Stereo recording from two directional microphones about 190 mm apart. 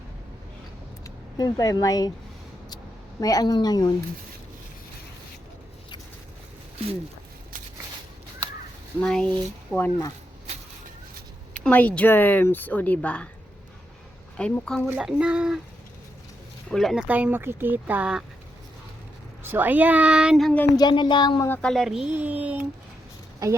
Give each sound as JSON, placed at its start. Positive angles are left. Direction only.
{"t": 1.0, "sound": "speech", "side_deg": 20}
{"t": 3.2, "sound": "speech", "side_deg": 20}
{"t": 9.0, "sound": "speech", "side_deg": 5}
{"t": 11.6, "sound": "speech", "side_deg": 10}
{"t": 14.3, "sound": "speech", "side_deg": 5}
{"t": 16.6, "sound": "speech", "side_deg": 0}
{"t": 19.4, "sound": "speech", "side_deg": -10}
{"t": 20.7, "sound": "speech", "side_deg": 25}
{"t": 21.4, "sound": "speech", "side_deg": 5}